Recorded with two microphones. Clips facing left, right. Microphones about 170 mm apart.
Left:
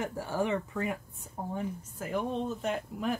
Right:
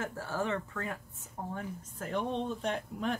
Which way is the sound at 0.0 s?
15° left (ahead or behind).